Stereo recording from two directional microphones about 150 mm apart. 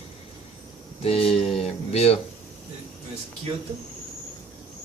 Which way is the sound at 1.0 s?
40° left (ahead or behind).